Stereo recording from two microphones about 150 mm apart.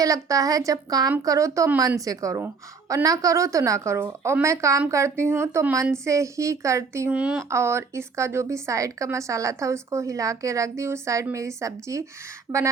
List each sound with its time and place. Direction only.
0.0 s a woman's voice: 20° right (ahead or behind)
7.1 s speech: 5° right (ahead or behind)
7.5 s a woman's voice: 15° right (ahead or behind)